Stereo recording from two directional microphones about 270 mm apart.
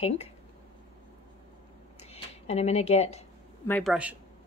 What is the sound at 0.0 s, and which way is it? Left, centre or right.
Speech, left.